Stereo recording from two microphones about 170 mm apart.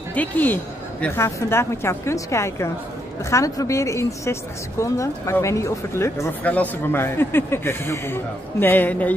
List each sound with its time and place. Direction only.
0.1 s a woman's voice: 10° left (ahead or behind)